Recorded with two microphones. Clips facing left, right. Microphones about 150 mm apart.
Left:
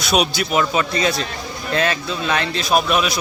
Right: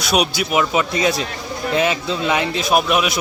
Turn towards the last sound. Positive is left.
turn(degrees=-10)  # may be behind; listen again after turning